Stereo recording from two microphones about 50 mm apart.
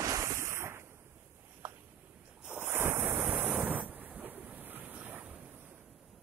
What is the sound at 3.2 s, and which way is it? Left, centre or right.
Waves, right.